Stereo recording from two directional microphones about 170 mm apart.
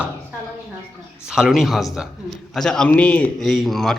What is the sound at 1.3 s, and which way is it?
A man's voice, 5° right (ahead or behind).